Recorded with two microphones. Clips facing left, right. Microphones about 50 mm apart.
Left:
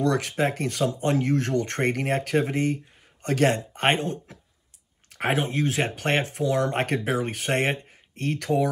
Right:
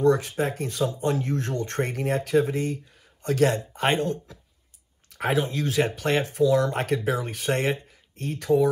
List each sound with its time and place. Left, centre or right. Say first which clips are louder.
0.0 s speech: right 2 dB; left